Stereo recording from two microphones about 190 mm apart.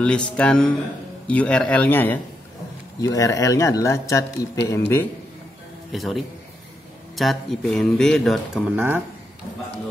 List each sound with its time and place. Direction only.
0.0 s speech: 5° left (ahead or behind)
5.9 s speech: centre (ahead or behind)
8.7 s speech: 10° right (ahead or behind)